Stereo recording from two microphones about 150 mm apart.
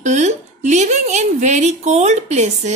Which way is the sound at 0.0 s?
50° right (ahead or behind).